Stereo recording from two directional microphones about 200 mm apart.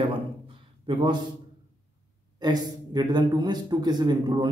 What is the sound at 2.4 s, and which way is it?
Speech, 20° right (ahead or behind).